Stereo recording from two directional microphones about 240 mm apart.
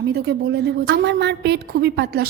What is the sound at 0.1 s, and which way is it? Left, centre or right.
A woman's voice, right.